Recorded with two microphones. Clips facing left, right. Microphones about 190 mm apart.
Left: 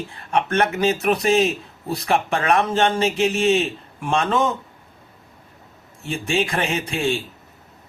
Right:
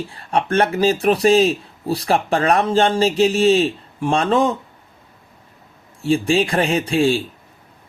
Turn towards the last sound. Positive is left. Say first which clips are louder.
# right 6 dB
turn(degrees=-35)  # may be behind; listen again after turning